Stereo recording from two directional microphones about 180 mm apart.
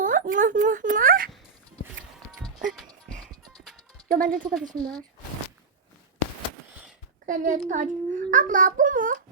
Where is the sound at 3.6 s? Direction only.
Centre (ahead or behind).